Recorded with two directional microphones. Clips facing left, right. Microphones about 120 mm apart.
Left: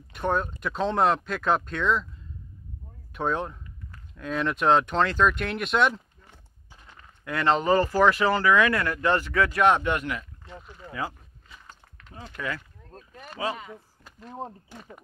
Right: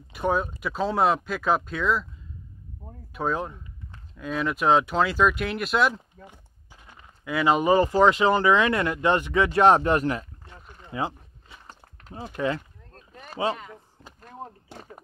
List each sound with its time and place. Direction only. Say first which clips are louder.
0.1 s speech: right 2 dB; 5° right (ahead or behind)
3.1 s speech: even; centre (ahead or behind)
6.2 s a sound: right 7 dB; 15° right (ahead or behind)
7.2 s speech: right 2 dB; 5° right (ahead or behind); by 10.2 s 35° right (ahead or behind)
10.9 s a sound: right 4 dB; 25° right (ahead or behind)
12.3 s speech: right 7 dB; 30° right (ahead or behind)
12.9 s a sound: left 2 dB; 5° left (ahead or behind)
13.3 s speech: right 4 dB; 30° right (ahead or behind)
14.4 s speech: left 3 dB; 25° left (ahead or behind)